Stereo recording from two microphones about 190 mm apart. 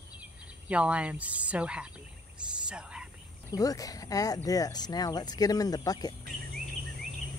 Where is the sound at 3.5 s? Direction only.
20° left (ahead or behind).